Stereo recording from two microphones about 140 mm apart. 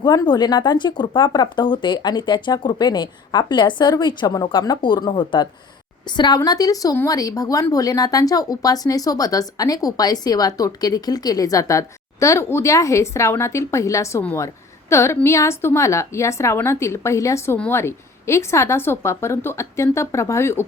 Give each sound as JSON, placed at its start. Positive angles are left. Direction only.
{"t": 0.0, "sound": "a woman's voice", "side_deg": 30}